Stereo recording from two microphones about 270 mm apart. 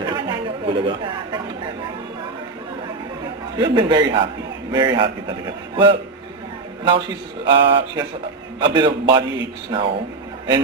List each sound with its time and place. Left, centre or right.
0.1 s chatter: centre
3.6 s a man's voice: centre